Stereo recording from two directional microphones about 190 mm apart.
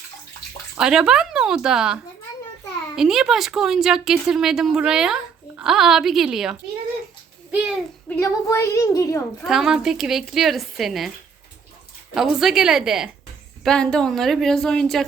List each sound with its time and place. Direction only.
0.8 s speech: 5° right (ahead or behind)
8.1 s a woman's voice: 15° left (ahead or behind)
9.5 s speech: centre (ahead or behind)
12.1 s speech: centre (ahead or behind)